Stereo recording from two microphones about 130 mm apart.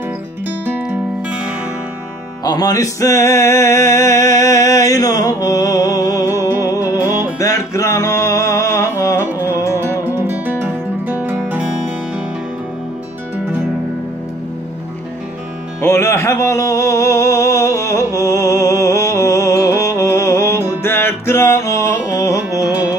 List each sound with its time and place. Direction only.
0.5 s music: 15° right (ahead or behind)
2.4 s music: 30° left (ahead or behind)
10.3 s music: 15° right (ahead or behind)
15.8 s music: 20° left (ahead or behind)